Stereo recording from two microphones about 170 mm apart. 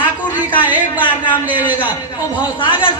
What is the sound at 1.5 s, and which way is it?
A woman's voice, 25° left (ahead or behind).